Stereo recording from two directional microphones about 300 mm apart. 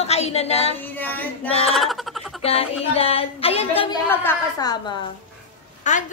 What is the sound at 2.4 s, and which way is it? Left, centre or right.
A woman's voice, centre.